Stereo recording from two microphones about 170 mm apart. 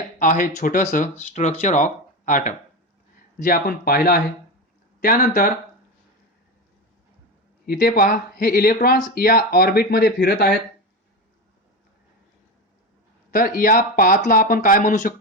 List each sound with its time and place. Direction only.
0.2 s speech: 50° left (ahead or behind)
3.3 s speech: 60° left (ahead or behind)
7.7 s speech: 65° left (ahead or behind)
13.3 s speech: 55° left (ahead or behind)